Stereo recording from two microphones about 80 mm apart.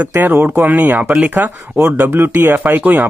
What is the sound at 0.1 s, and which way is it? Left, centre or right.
Speech, right.